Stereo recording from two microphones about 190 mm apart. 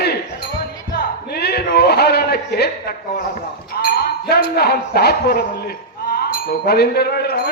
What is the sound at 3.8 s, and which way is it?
Speech, 50° left (ahead or behind).